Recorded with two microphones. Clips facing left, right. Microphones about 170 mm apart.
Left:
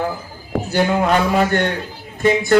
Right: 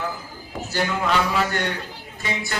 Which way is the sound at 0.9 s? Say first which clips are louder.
Left 4 dB; 45° left (ahead or behind).